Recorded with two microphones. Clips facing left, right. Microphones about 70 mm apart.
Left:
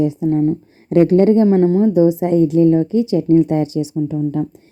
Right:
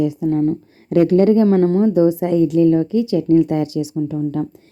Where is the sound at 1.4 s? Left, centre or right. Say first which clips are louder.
Left 1 dB; centre.